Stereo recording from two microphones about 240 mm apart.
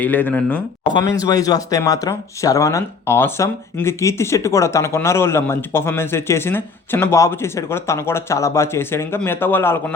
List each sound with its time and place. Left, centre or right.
0.0 s speech: centre